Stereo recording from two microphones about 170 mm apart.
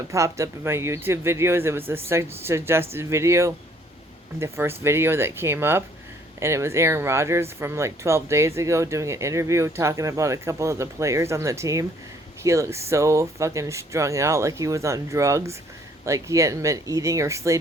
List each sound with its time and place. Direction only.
0.1 s speech: 15° right (ahead or behind)